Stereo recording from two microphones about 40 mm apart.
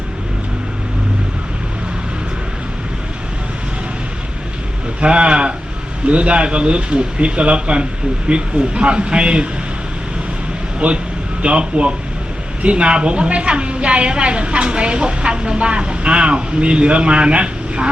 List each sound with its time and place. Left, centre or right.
4.9 s a woman's voice: right
10.8 s a woman's voice: right